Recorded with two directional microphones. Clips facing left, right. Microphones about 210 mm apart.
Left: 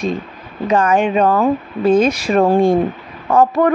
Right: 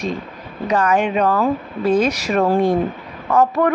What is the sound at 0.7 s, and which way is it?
Speech, 25° left (ahead or behind).